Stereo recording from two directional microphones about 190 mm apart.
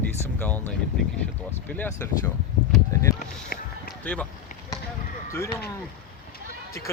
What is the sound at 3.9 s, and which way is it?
Run, 5° left (ahead or behind).